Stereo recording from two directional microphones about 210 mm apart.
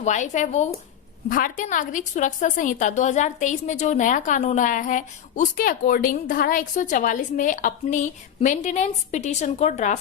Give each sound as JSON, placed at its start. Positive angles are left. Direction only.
{"t": 0.0, "sound": "a woman's voice", "side_deg": 35}